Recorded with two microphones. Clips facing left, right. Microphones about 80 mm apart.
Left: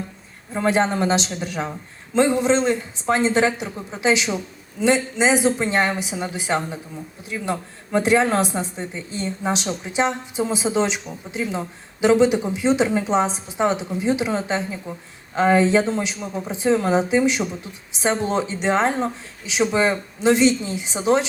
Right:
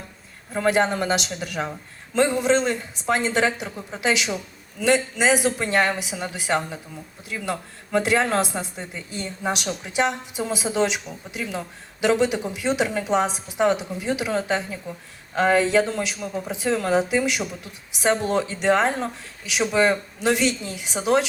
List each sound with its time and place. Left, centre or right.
0.5 s a woman's voice: left
7.9 s a woman's voice: left
12.0 s a woman's voice: left
15.6 s a woman's voice: left